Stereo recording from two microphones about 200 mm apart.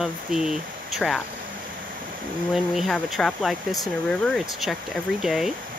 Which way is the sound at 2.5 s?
Centre (ahead or behind).